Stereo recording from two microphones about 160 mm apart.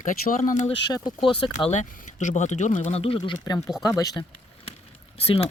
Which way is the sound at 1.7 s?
50° left (ahead or behind).